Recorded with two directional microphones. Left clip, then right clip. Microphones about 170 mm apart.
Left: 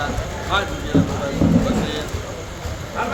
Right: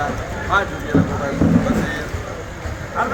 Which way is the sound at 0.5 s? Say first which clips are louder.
Right 3 dB; centre (ahead or behind).